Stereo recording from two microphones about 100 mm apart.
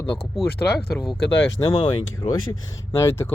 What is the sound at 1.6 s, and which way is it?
Speech, 50° left (ahead or behind).